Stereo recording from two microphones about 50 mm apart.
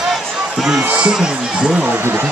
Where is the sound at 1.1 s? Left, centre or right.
Centre.